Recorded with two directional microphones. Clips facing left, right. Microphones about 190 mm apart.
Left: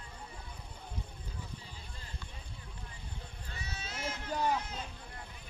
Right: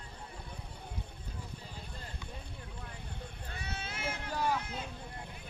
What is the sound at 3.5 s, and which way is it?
Run, 55° right (ahead or behind).